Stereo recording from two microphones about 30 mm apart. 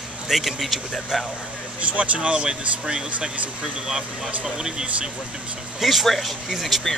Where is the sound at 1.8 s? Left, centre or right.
Right.